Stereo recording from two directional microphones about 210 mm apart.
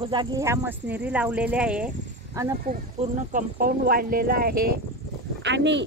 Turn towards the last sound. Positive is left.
turn(degrees=-55)  # may be behind; listen again after turning